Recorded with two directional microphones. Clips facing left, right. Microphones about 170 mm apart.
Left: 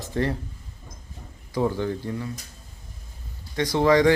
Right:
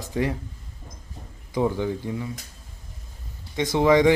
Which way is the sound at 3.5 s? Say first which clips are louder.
Right 1 dB; 15° right (ahead or behind).